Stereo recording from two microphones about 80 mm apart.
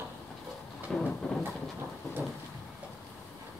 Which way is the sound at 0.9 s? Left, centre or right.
Centre.